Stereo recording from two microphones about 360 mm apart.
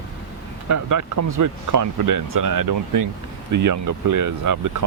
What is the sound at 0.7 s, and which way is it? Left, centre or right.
Speech, right.